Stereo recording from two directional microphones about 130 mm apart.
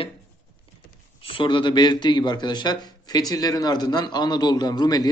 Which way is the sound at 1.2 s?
45° left (ahead or behind).